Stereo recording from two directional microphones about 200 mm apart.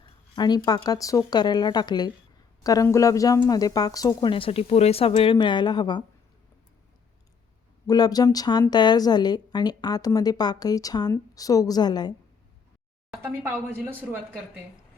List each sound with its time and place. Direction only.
0.0 s a woman's voice: 20° left (ahead or behind)
7.9 s a woman's voice: 20° left (ahead or behind)
13.2 s speech: 10° right (ahead or behind)